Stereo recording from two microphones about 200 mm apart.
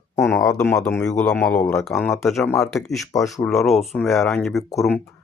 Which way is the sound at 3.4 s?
15° left (ahead or behind).